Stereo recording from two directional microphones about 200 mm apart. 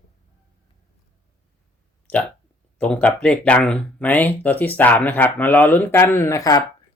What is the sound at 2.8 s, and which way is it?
Speech, 5° left (ahead or behind).